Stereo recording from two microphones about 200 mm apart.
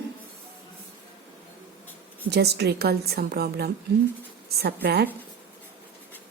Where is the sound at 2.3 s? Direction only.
55° right (ahead or behind).